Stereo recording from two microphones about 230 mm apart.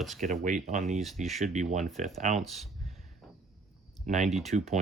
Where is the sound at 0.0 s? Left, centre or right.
Centre.